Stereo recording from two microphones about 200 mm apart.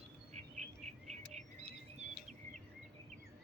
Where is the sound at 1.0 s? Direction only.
35° right (ahead or behind).